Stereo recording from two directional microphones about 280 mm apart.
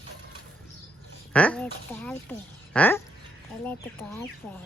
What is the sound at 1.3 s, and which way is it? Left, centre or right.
Speech, centre.